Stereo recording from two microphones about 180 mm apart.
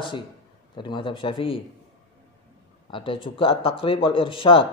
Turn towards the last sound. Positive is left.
turn(degrees=30)  # may be behind; listen again after turning